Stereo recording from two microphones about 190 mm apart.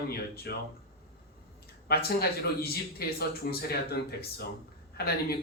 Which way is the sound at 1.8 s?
55° left (ahead or behind).